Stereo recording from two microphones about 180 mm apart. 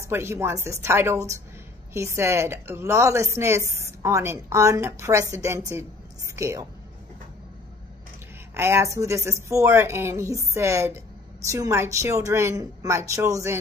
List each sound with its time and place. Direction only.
0.0 s a woman's voice: 15° right (ahead or behind)
8.5 s speech: 15° right (ahead or behind)